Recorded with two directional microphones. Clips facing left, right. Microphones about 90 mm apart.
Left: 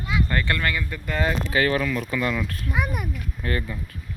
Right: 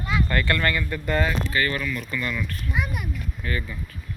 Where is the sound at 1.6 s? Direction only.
90° left.